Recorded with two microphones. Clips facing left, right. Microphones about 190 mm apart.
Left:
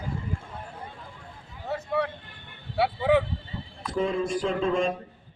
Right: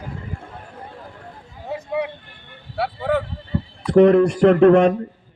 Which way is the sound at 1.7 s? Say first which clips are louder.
Right 3 dB; 15° right (ahead or behind).